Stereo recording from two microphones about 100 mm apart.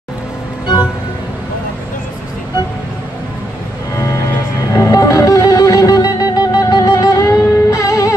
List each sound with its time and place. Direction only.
4.7 s music: 35° left (ahead or behind)